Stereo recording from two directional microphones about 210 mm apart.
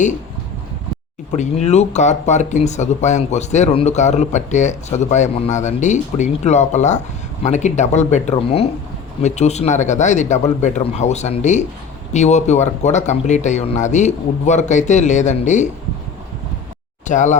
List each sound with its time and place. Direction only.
1.4 s speech: 30° left (ahead or behind)
17.1 s speech: 35° left (ahead or behind)